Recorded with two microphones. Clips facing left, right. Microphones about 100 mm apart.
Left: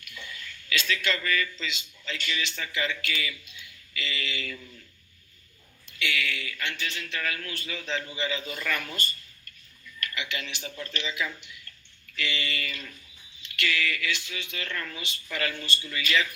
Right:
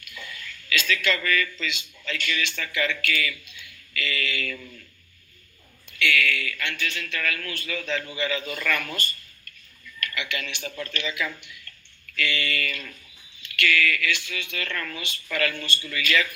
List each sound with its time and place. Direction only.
0.1 s speech: 30° left (ahead or behind)
6.0 s speech: 25° left (ahead or behind)
8.8 s speech: 50° right (ahead or behind)
10.2 s speech: 30° left (ahead or behind)
14.7 s a woman's voice: 55° right (ahead or behind)
14.9 s speech: 25° left (ahead or behind)